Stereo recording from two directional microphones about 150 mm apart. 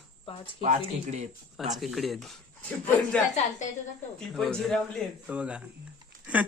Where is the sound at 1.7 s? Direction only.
Centre (ahead or behind).